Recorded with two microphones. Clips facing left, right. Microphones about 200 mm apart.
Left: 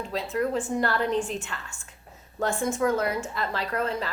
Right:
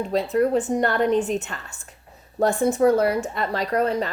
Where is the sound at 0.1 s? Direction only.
40° right (ahead or behind).